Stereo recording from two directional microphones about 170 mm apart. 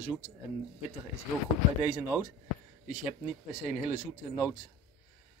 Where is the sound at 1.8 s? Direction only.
10° right (ahead or behind).